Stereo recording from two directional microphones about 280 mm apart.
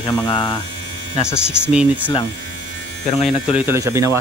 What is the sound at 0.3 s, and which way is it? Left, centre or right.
Speech, centre.